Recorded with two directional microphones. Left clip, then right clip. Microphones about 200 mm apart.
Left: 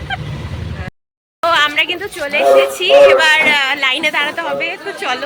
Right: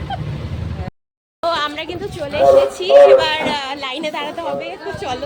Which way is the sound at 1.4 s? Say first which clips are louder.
Left 7 dB; 5° left (ahead or behind).